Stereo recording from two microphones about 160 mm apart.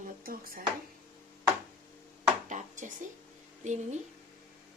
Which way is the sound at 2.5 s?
50° right (ahead or behind).